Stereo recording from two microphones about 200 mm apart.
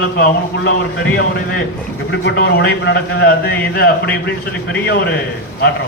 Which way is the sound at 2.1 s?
60° left (ahead or behind).